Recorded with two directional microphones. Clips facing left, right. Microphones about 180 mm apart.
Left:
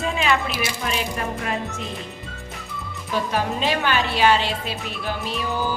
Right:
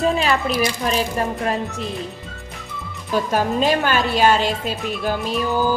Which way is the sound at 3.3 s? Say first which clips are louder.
Right 6 dB; 45° right (ahead or behind).